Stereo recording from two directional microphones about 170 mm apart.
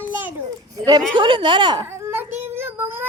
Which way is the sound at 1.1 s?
30° right (ahead or behind).